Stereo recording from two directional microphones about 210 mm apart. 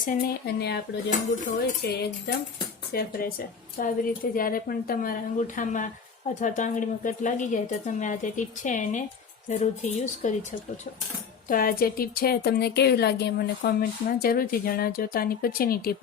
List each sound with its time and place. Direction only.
0.0 s speech: 40° left (ahead or behind)
1.8 s speech: 50° left (ahead or behind)
11.4 s speech: 40° left (ahead or behind)